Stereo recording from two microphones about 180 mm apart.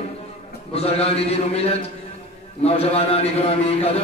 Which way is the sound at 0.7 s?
35° left (ahead or behind).